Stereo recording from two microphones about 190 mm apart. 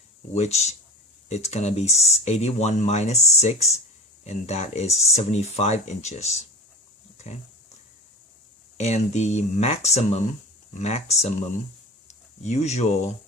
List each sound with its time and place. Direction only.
0.3 s speech: 35° left (ahead or behind)
8.8 s speech: 35° left (ahead or behind)